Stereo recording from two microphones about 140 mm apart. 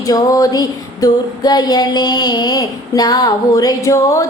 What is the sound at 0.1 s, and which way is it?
Female singing, 25° left (ahead or behind).